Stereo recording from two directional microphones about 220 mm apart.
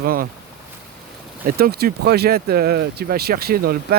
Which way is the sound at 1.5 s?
45° right (ahead or behind).